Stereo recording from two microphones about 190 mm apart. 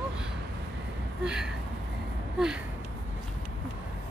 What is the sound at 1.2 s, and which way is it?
Speech, 5° right (ahead or behind).